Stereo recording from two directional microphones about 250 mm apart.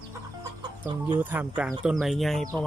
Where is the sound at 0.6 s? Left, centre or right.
Centre.